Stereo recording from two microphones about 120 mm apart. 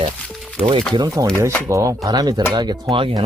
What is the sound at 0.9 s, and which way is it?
Speech, 35° right (ahead or behind).